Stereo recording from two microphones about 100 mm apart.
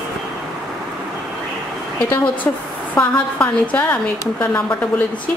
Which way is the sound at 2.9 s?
15° left (ahead or behind).